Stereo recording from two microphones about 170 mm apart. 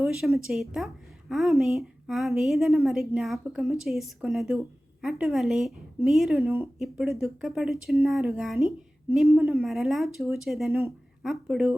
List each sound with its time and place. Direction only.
0.0 s a sound: 5° right (ahead or behind)
0.3 s a woman's voice: centre (ahead or behind)
6.4 s speech: 15° right (ahead or behind)
6.7 s a woman's voice: centre (ahead or behind)